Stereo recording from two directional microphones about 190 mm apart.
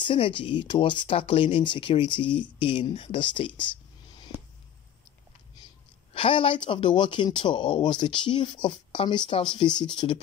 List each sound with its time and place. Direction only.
0.1 s speech: 25° left (ahead or behind)
6.1 s speech: 30° left (ahead or behind)